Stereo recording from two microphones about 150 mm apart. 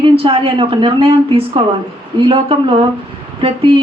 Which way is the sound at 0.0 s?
35° right (ahead or behind).